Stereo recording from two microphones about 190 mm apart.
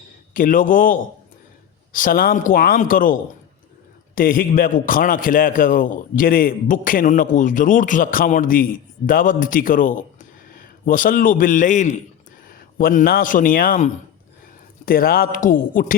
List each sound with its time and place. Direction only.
0.3 s a man's voice: 45° left (ahead or behind)